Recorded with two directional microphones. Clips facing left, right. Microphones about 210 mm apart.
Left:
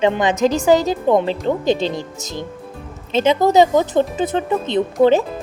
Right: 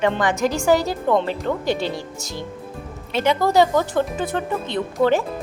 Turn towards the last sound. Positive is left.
turn(degrees=20)  # may be behind; listen again after turning